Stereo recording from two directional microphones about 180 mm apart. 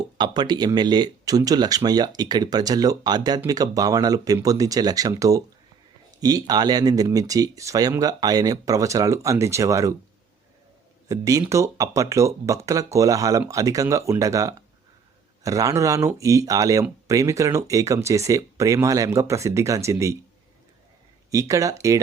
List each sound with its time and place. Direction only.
0.2 s speech: 25° right (ahead or behind)
11.1 s speech: 20° right (ahead or behind)
21.2 s speech: 20° right (ahead or behind)